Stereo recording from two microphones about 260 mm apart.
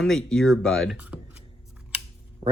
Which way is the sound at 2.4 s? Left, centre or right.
Centre.